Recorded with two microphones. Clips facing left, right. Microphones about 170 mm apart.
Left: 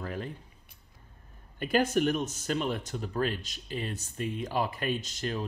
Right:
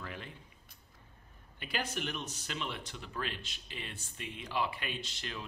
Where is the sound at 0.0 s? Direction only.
40° left (ahead or behind).